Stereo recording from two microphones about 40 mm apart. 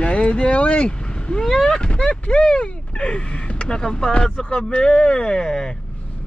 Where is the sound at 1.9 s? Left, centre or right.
Left.